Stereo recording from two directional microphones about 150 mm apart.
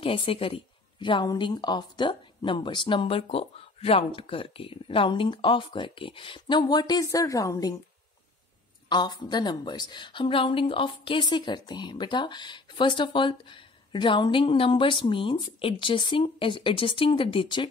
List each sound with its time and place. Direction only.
0.0 s a woman's voice: 35° left (ahead or behind)
8.8 s a woman's voice: 30° left (ahead or behind)